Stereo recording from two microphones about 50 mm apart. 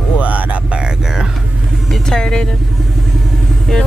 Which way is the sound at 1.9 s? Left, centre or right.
Centre.